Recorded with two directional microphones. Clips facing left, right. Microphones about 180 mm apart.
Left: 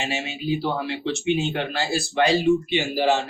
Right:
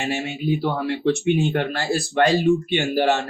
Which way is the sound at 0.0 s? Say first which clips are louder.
Right 3 dB; 55° right (ahead or behind).